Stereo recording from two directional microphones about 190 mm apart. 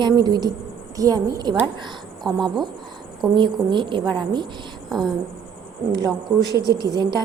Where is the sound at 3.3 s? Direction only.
25° right (ahead or behind).